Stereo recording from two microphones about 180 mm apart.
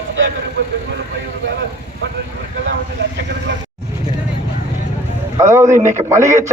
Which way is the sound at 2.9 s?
75° right (ahead or behind).